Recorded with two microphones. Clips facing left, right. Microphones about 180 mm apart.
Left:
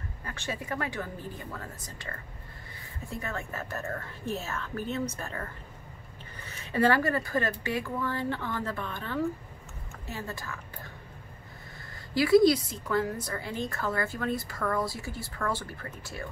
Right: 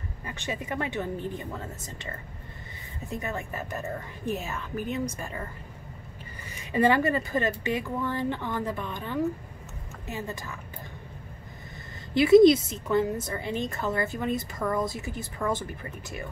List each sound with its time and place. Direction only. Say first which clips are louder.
0.2 s a woman's voice: right 2 dB; 20° right (ahead or behind)
12.1 s a woman's voice: right 5 dB; 20° right (ahead or behind)